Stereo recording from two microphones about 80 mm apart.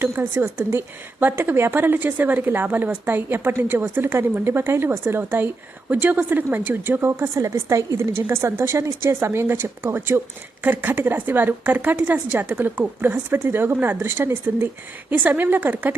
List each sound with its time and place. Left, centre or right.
0.0 s a woman's voice: right